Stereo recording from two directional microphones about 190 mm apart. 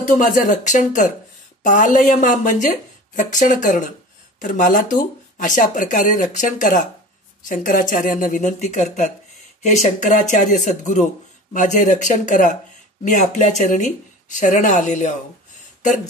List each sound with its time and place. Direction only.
0.0 s speech: 40° left (ahead or behind)